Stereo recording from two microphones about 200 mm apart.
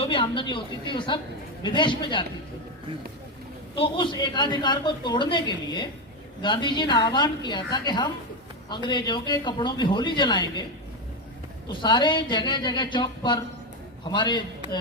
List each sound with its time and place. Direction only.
0.0 s a woman's voice: 25° left (ahead or behind)
3.8 s a woman's voice: 25° left (ahead or behind)
11.7 s a woman's voice: 25° left (ahead or behind)